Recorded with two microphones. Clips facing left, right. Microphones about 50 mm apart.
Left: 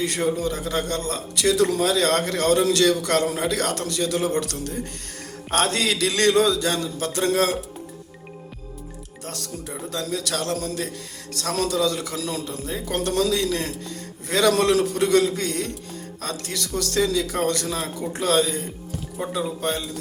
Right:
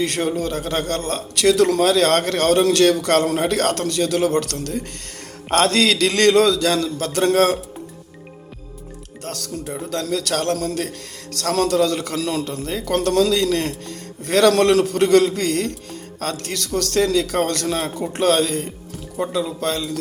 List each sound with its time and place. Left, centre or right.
0.0 s a man's voice: right
7.0 s a man's voice: right
9.6 s a man's voice: right
19.2 s music: right